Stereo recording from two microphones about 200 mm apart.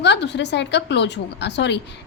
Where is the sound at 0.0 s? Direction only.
60° left (ahead or behind).